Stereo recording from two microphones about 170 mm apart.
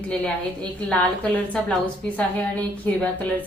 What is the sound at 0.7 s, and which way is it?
A woman's voice, 5° left (ahead or behind).